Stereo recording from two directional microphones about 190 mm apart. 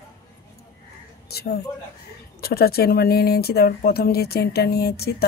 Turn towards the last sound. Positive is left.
turn(degrees=55)  # may be behind; listen again after turning